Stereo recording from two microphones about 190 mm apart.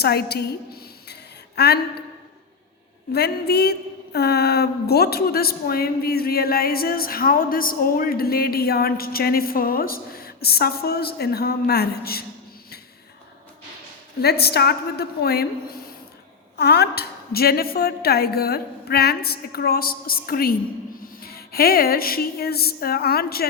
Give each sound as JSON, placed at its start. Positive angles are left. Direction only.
{"t": 0.0, "sound": "a sound", "side_deg": 55}
{"t": 3.1, "sound": "a woman's voice", "side_deg": 55}
{"t": 14.2, "sound": "a woman's voice", "side_deg": 55}
{"t": 16.6, "sound": "a woman's voice", "side_deg": 60}